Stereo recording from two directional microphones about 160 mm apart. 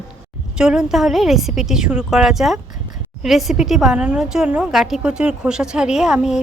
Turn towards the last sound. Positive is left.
turn(degrees=-5)  # may be behind; listen again after turning